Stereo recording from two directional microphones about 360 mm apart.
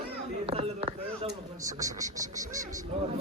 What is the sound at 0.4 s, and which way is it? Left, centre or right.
Speech, centre.